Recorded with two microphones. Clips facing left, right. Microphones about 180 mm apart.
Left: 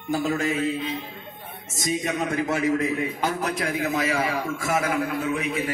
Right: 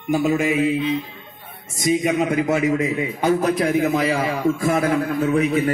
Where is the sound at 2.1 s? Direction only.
20° right (ahead or behind); by 5.6 s 35° right (ahead or behind).